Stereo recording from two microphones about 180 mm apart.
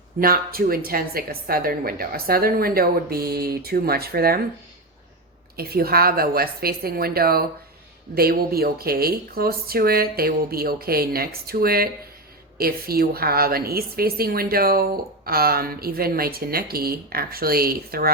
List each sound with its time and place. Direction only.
0.2 s a woman's voice: 55° right (ahead or behind)
5.5 s a woman's voice: 60° right (ahead or behind)